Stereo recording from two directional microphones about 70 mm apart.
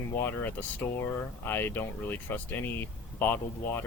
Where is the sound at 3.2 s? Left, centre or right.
Left.